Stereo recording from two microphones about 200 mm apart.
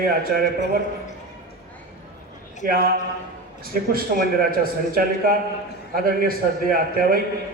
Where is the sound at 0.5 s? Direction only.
60° right (ahead or behind).